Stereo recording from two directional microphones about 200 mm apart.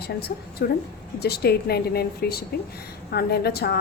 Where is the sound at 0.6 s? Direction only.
55° left (ahead or behind).